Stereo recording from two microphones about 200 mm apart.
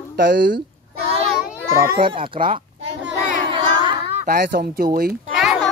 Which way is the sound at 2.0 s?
25° right (ahead or behind).